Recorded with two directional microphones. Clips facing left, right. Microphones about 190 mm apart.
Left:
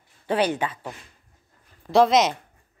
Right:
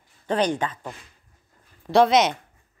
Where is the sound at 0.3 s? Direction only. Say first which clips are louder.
Even; 10° left (ahead or behind).